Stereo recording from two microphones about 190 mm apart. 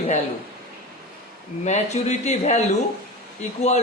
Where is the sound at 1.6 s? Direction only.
35° left (ahead or behind).